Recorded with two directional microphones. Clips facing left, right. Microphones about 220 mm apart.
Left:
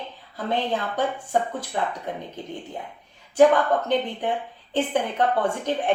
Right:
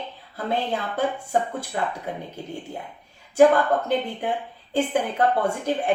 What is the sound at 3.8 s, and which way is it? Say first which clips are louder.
A woman's voice: left 1 dB; 10° right (ahead or behind).